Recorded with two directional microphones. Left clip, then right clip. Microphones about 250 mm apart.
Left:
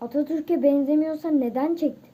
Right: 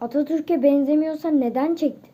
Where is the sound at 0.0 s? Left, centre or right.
Centre.